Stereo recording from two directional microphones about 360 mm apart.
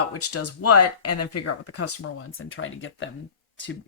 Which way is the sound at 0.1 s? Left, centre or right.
Left.